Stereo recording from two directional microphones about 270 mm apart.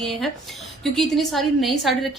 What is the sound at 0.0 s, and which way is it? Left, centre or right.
A woman's voice, centre.